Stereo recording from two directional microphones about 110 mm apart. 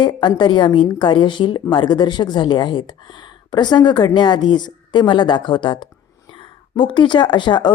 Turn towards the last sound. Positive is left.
turn(degrees=45)  # may be behind; listen again after turning